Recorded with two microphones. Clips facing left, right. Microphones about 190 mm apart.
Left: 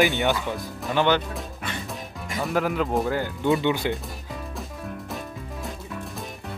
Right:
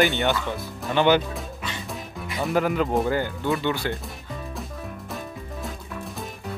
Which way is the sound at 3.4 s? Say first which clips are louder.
Left 3 dB; 20° left (ahead or behind).